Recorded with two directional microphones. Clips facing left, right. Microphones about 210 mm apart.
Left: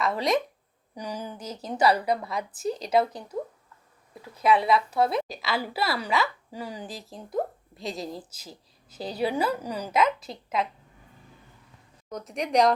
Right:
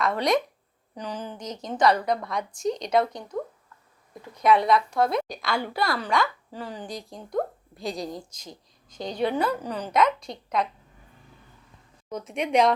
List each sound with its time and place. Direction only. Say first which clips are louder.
0.0 s a woman's voice: right 2 dB; centre (ahead or behind)
12.0 s a woman's voice: right 2 dB; centre (ahead or behind)